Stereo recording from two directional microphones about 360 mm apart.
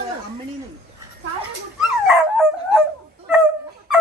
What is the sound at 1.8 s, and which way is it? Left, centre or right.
Dog, centre.